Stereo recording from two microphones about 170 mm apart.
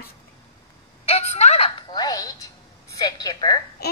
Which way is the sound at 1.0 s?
40° left (ahead or behind).